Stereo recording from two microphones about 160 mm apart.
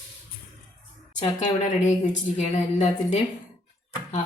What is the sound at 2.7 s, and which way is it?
Speech, 45° left (ahead or behind).